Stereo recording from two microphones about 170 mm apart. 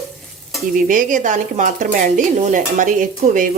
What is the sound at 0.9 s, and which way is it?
Speech, 50° right (ahead or behind).